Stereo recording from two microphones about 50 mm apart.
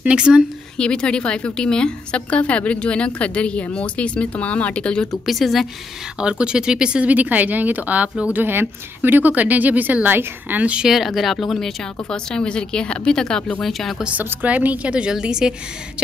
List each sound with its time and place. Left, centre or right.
0.0 s speech: right
0.7 s a woman's voice: centre
5.2 s a woman's voice: centre
6.1 s speech: centre
7.1 s a woman's voice: right
8.3 s a woman's voice: right
10.8 s a woman's voice: centre
14.3 s a woman's voice: right; by 15.5 s centre